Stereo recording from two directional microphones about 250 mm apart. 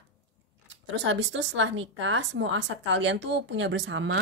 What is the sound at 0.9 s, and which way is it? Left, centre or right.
A woman's voice, right.